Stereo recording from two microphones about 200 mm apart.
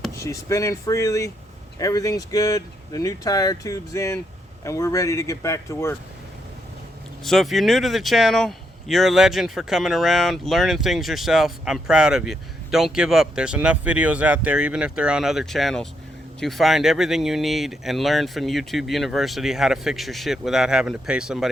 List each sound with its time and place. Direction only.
0.2 s speech: 15° left (ahead or behind)
7.3 s speech: centre (ahead or behind)